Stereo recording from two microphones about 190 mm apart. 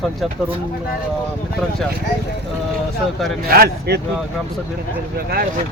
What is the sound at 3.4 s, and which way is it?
Speech, 55° right (ahead or behind).